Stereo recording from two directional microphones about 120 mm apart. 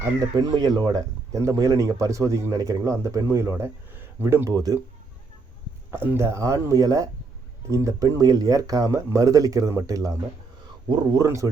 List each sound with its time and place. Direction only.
0.0 s speech: 30° right (ahead or behind)
5.9 s speech: 20° right (ahead or behind)